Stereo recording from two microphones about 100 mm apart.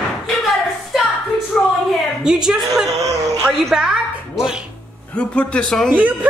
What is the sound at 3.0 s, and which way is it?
Speech, 35° right (ahead or behind).